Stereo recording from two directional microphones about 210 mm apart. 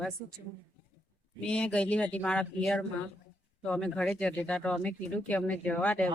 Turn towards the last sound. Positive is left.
turn(degrees=5)  # may be behind; listen again after turning